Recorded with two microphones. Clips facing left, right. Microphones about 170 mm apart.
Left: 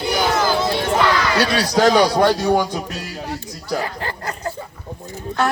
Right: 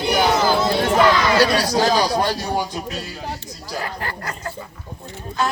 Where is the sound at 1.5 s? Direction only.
70° left (ahead or behind).